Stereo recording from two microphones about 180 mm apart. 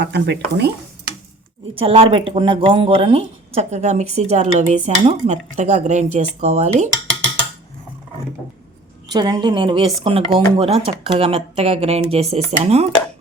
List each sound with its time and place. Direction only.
0.0 s speech: 70° right (ahead or behind)
1.7 s speech: 30° right (ahead or behind)
9.0 s a woman's voice: 20° right (ahead or behind)